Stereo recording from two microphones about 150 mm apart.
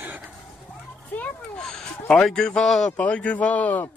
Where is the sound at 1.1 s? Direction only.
5° left (ahead or behind).